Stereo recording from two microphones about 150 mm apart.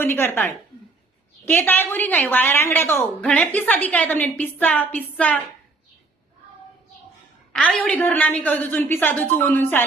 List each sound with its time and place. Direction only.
0.0 s a woman's voice: 15° left (ahead or behind)
7.5 s a woman's voice: 5° left (ahead or behind)